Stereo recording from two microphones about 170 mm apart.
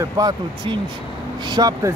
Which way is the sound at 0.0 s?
20° right (ahead or behind).